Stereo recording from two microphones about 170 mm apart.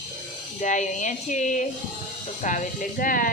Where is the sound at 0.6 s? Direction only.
45° left (ahead or behind).